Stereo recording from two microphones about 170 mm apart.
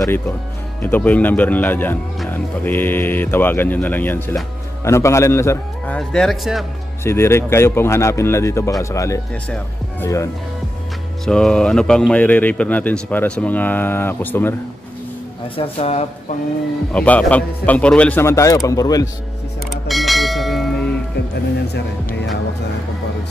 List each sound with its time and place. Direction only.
0.8 s speech: 10° left (ahead or behind)
5.9 s speech: centre (ahead or behind)
7.0 s speech: 15° left (ahead or behind)
11.2 s speech: 5° left (ahead or behind)
15.5 s speech: 35° left (ahead or behind)
16.9 s speech: 10° left (ahead or behind)
19.9 s bell: centre (ahead or behind)
21.7 s music: 85° left